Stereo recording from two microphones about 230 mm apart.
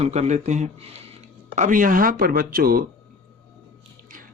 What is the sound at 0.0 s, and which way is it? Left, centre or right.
Speech, right.